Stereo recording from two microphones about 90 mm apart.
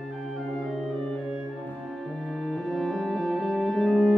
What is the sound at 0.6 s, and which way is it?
Organ, centre (ahead or behind).